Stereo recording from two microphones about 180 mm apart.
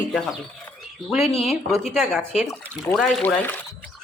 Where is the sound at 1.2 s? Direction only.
35° left (ahead or behind).